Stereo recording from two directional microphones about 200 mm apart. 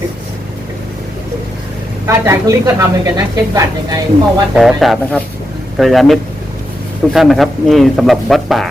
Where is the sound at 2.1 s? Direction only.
15° right (ahead or behind).